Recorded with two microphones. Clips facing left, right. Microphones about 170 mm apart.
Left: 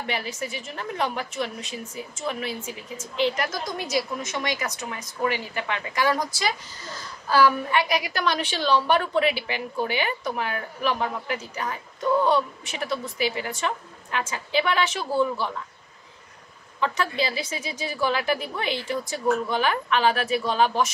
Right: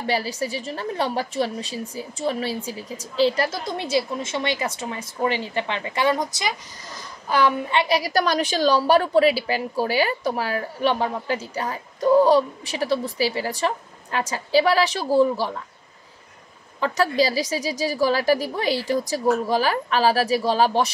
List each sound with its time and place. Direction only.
0.0 s a woman's voice: 35° right (ahead or behind)
16.8 s a woman's voice: 40° right (ahead or behind)